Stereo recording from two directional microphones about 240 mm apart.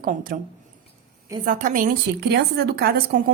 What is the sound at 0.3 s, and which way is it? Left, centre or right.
Speech, right.